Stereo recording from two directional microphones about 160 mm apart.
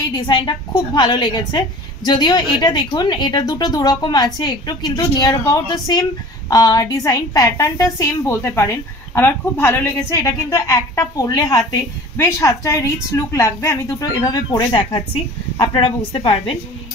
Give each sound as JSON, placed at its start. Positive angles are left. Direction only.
{"t": 0.1, "sound": "a woman's voice", "side_deg": 30}